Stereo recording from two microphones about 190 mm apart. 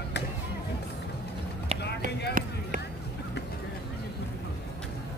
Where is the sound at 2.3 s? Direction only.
45° right (ahead or behind).